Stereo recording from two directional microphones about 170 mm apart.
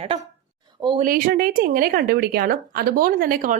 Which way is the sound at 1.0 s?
55° right (ahead or behind).